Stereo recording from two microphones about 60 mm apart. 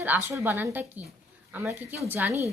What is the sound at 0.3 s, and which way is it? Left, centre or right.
A woman's voice, right.